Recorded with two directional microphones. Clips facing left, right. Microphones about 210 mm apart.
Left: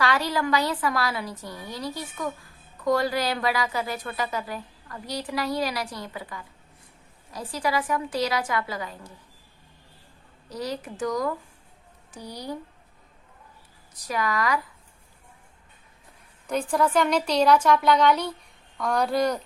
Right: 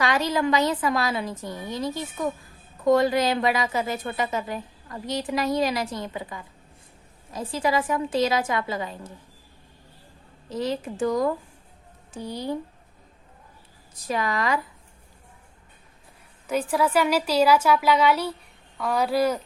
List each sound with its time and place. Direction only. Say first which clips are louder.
0.0 s a woman's voice: right 2 dB; 20° right (ahead or behind)
10.5 s a woman's voice: right 4 dB; 25° right (ahead or behind)
14.1 s a woman's voice: right 1 dB; 25° right (ahead or behind)
16.5 s a woman's voice: right 1 dB; 5° right (ahead or behind)